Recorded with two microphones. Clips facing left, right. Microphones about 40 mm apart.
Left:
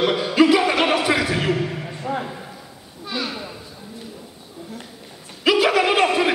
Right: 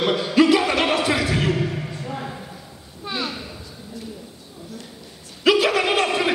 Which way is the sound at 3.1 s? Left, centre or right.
Centre.